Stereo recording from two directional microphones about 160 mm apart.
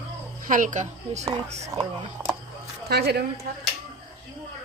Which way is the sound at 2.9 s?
85° right.